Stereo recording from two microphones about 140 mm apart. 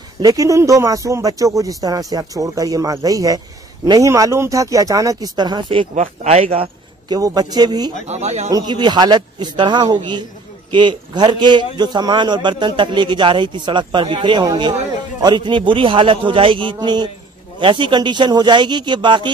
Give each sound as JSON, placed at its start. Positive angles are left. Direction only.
{"t": 0.2, "sound": "speech", "side_deg": -25}
{"t": 5.9, "sound": "speech", "side_deg": -45}
{"t": 7.1, "sound": "speech", "side_deg": -25}
{"t": 8.1, "sound": "speech", "side_deg": -50}
{"t": 8.5, "sound": "a man's voice", "side_deg": -30}